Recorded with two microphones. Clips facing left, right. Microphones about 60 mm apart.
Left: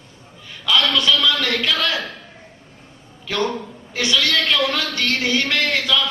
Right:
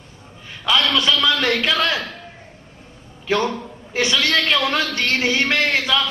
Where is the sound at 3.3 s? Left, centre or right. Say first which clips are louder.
Right 2 dB; right.